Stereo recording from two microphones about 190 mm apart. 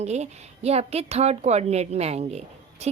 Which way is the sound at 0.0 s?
35° right (ahead or behind).